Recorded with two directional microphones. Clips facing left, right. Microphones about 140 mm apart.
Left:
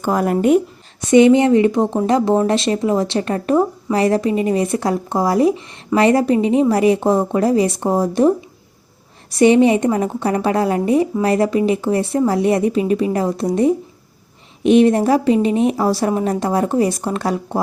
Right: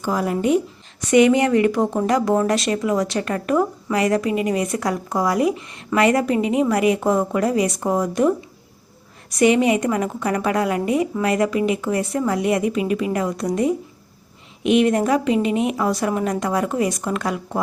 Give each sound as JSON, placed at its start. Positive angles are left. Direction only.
{"t": 0.0, "sound": "speech", "side_deg": 50}
{"t": 1.0, "sound": "a woman's voice", "side_deg": 25}